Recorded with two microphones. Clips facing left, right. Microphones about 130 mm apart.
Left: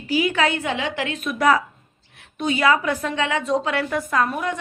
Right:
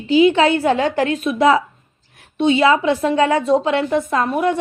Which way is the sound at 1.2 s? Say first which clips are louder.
Right 2 dB; 25° right (ahead or behind).